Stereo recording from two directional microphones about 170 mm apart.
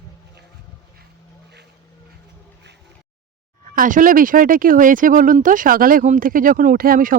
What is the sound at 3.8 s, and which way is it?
Speech, 50° right (ahead or behind).